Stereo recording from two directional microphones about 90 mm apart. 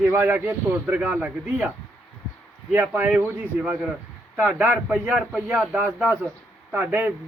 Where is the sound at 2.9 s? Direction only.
20° right (ahead or behind).